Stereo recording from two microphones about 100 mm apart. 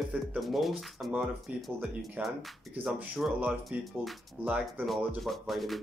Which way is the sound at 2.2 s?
15° right (ahead or behind).